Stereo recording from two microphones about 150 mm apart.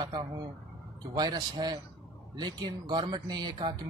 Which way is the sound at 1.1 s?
30° right (ahead or behind).